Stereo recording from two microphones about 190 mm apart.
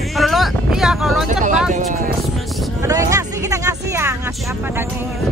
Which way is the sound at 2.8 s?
15° right (ahead or behind).